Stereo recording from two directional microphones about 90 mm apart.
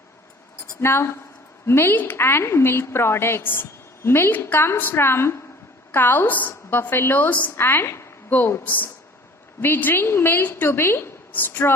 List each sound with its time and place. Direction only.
0.8 s a woman's voice: 30° left (ahead or behind)